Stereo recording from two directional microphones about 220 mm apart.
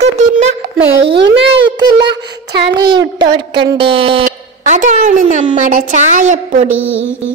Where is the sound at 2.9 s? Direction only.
20° right (ahead or behind).